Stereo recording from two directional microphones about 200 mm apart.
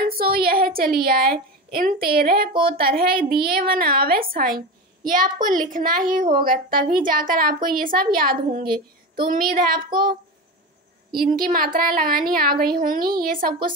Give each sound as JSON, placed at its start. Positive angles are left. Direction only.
{"t": 0.1, "sound": "a woman's voice", "side_deg": -50}
{"t": 11.1, "sound": "a woman's voice", "side_deg": -45}